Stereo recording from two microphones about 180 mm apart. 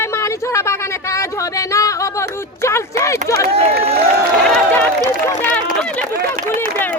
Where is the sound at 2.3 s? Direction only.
15° left (ahead or behind).